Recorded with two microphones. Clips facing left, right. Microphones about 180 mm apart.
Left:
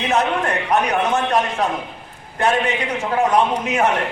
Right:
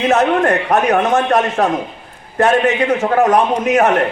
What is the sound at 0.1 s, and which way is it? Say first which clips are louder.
A man's voice: right 5 dB; 60° right (ahead or behind).